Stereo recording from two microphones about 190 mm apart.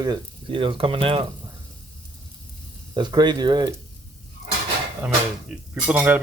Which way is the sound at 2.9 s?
20° right (ahead or behind).